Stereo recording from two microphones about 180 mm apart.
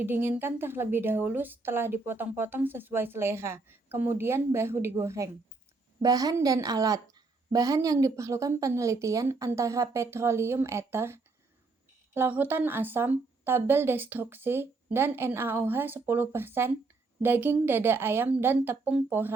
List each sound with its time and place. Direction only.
0.0 s a woman's voice: 10° right (ahead or behind)